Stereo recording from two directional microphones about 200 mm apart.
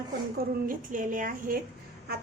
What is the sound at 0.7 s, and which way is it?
Speech, 40° right (ahead or behind).